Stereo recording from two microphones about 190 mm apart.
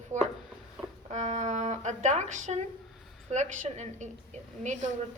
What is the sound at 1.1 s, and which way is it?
A woman's voice, 40° right (ahead or behind).